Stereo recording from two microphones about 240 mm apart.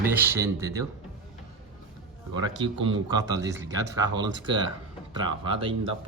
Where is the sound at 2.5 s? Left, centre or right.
Right.